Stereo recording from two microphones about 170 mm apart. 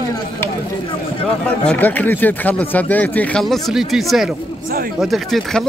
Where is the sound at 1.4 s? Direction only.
5° left (ahead or behind).